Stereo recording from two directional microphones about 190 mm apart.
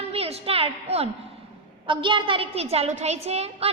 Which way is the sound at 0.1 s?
30° right (ahead or behind).